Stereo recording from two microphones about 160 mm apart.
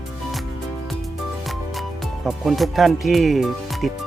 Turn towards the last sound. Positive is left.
turn(degrees=0)  # may be behind; listen again after turning